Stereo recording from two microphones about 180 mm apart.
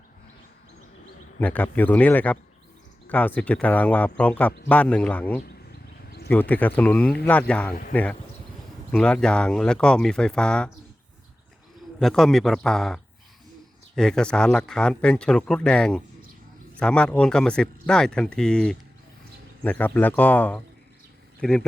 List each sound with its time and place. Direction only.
1.4 s speech: 10° left (ahead or behind)
7.7 s speech: 50° left (ahead or behind)
8.9 s speech: 5° left (ahead or behind)
11.9 s speech: centre (ahead or behind)